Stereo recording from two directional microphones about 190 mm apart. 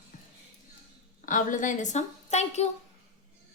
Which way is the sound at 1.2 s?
45° left (ahead or behind).